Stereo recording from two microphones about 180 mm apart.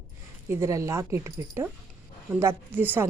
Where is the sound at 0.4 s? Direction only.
15° right (ahead or behind).